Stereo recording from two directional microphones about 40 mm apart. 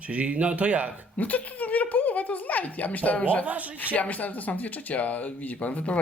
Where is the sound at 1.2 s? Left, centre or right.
Left.